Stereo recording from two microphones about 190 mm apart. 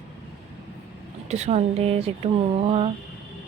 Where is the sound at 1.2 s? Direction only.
35° right (ahead or behind).